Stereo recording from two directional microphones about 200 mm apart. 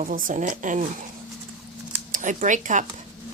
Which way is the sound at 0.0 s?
40° right (ahead or behind).